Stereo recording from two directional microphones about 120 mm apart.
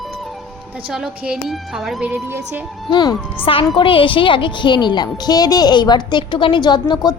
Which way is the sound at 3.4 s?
50° left (ahead or behind).